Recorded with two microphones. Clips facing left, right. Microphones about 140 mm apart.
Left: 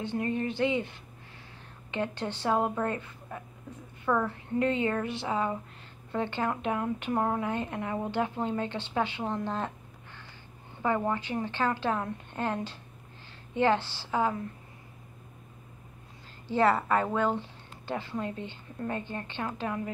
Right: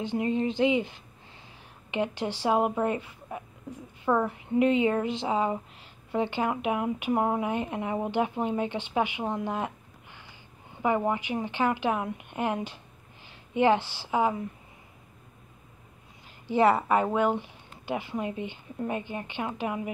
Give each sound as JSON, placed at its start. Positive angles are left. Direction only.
{"t": 0.0, "sound": "speech", "side_deg": -20}
{"t": 10.8, "sound": "speech", "side_deg": -15}
{"t": 16.4, "sound": "speech", "side_deg": -15}